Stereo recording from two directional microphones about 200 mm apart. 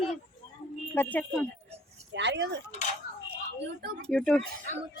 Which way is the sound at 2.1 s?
60° right (ahead or behind).